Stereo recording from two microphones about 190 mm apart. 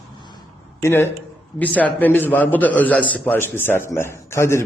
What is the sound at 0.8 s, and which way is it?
A man's voice, 10° left (ahead or behind).